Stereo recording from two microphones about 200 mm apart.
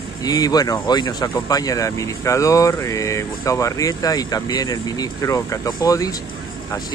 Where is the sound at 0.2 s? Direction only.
20° left (ahead or behind).